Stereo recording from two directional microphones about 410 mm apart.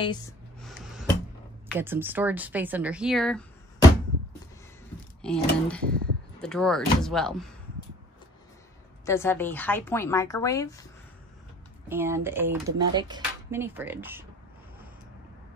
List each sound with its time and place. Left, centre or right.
0.0 s a sound: centre
1.7 s speech: centre
5.2 s speech: centre
5.9 s speech: right
6.4 s speech: centre
9.0 s speech: centre
11.9 s speech: centre